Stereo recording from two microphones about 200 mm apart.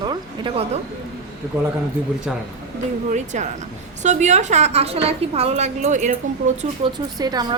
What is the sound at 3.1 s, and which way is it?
A woman's voice, 35° right (ahead or behind).